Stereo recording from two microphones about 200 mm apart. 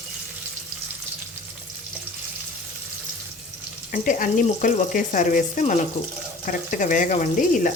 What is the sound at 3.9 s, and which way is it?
Speech, 40° left (ahead or behind).